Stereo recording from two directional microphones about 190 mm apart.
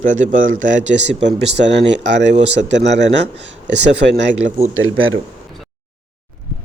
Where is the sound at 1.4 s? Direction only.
65° right (ahead or behind).